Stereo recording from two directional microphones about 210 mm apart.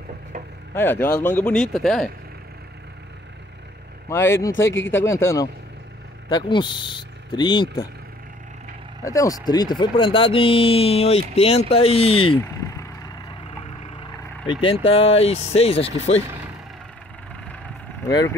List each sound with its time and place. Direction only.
0.7 s speech: 10° left (ahead or behind)
4.1 s speech: 10° left (ahead or behind)
4.6 s speech: 65° left (ahead or behind)
4.9 s speech: 10° left (ahead or behind)
9.0 s speech: 15° left (ahead or behind)
14.4 s speech: 25° left (ahead or behind)
18.0 s speech: 15° left (ahead or behind)